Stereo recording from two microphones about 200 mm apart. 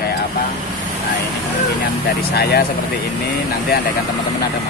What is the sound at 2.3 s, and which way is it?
Speech, 55° left (ahead or behind).